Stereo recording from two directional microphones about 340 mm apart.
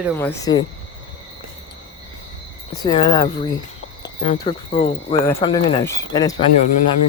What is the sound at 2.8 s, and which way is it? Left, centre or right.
Speech, centre.